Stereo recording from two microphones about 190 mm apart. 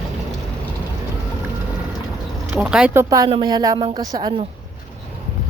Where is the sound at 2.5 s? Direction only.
5° right (ahead or behind).